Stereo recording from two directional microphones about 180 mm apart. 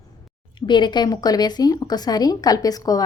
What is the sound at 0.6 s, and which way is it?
A woman's voice, 25° left (ahead or behind).